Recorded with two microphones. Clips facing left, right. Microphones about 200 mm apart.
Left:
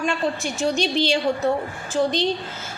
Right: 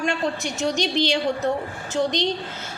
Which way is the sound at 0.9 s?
20° right (ahead or behind).